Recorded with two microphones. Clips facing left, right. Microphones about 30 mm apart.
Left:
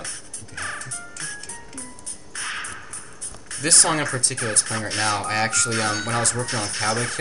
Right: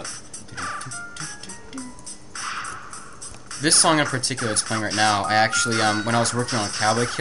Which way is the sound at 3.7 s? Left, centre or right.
Right.